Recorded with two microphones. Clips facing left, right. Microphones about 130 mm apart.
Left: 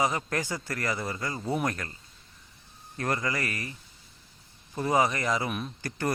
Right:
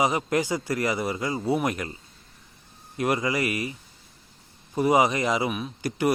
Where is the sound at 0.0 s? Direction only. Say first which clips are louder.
Right 5 dB; 15° right (ahead or behind).